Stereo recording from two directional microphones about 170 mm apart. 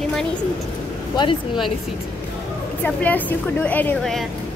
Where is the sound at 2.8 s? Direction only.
10° left (ahead or behind).